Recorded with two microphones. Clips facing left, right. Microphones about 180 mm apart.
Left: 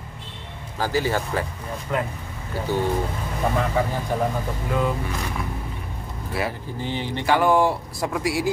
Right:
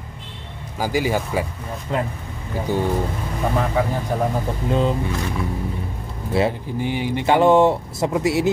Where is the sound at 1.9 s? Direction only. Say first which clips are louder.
Right 2 dB; 25° right (ahead or behind).